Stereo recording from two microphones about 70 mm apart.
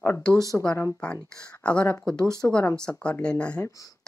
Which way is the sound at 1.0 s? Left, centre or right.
Centre.